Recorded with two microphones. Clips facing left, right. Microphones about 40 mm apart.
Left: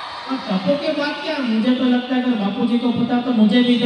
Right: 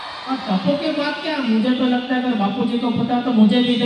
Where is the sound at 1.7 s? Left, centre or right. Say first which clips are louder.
Left 1 dB; centre.